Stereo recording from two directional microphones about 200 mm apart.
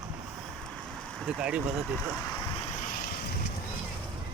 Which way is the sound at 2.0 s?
10° left (ahead or behind).